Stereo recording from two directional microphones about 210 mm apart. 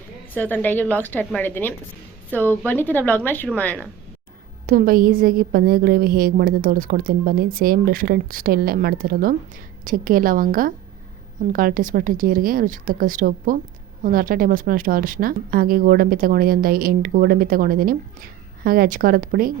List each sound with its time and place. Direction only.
0.3 s a woman's voice: 10° left (ahead or behind)
4.6 s speech: 40° right (ahead or behind)